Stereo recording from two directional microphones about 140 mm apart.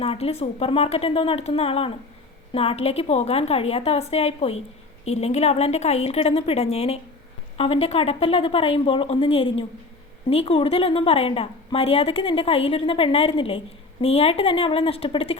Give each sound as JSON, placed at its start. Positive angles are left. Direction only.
{"t": 0.0, "sound": "a woman's voice", "side_deg": 45}